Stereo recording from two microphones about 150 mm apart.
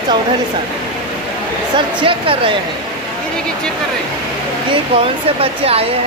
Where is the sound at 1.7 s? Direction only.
35° right (ahead or behind).